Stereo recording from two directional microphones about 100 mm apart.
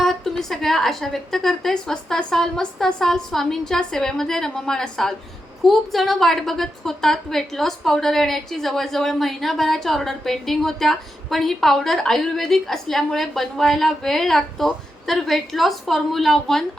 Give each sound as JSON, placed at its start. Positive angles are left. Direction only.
{"t": 0.0, "sound": "a woman's voice", "side_deg": 5}